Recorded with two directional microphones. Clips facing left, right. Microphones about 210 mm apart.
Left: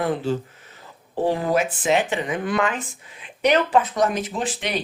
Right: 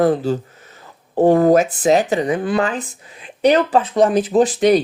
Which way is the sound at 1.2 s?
50° right (ahead or behind).